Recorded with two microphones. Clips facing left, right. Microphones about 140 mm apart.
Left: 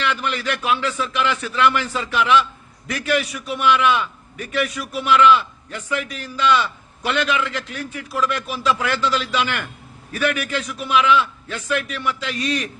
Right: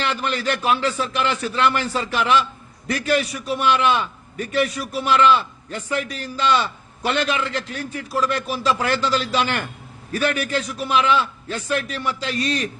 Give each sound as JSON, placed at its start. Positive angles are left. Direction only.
{"t": 0.0, "sound": "a man's voice", "side_deg": -35}